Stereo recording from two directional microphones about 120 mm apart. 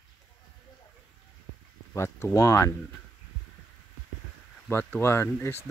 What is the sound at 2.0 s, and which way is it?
Speech, 20° left (ahead or behind).